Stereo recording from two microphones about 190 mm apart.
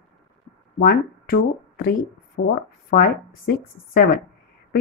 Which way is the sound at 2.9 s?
50° left (ahead or behind).